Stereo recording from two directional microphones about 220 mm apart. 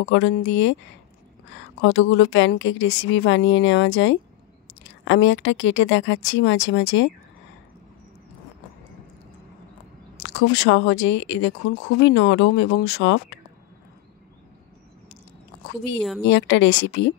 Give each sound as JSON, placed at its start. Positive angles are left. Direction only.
{"t": 0.0, "sound": "a woman's voice", "side_deg": 55}
{"t": 10.1, "sound": "speech", "side_deg": 50}
{"t": 16.3, "sound": "speech", "side_deg": 55}